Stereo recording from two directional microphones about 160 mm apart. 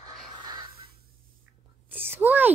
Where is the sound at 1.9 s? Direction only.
10° right (ahead or behind).